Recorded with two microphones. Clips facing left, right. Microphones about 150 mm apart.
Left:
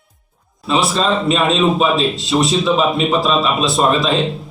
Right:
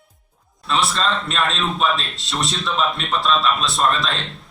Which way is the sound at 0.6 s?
Centre (ahead or behind).